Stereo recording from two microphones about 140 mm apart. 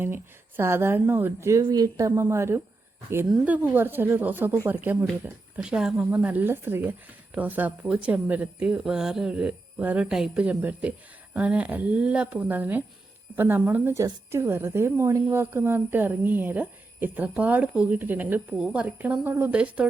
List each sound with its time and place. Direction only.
0.0 s a woman's voice: 15° right (ahead or behind)